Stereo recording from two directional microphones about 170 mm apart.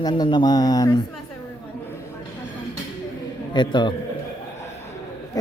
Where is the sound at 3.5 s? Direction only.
25° left (ahead or behind).